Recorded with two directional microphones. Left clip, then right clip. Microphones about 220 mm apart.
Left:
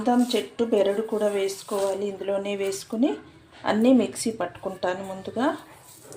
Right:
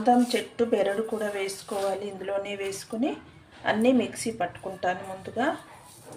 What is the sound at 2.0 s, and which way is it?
Speech, 15° left (ahead or behind).